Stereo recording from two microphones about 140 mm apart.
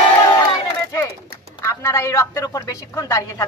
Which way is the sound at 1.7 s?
20° left (ahead or behind).